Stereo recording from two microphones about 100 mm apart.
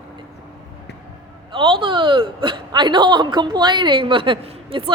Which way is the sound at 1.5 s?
55° right (ahead or behind).